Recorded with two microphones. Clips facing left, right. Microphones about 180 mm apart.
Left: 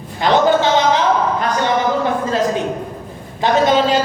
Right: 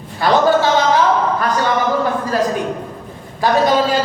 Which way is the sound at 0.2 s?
20° left (ahead or behind).